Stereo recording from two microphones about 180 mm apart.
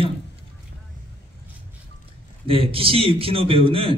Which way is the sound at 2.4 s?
30° right (ahead or behind).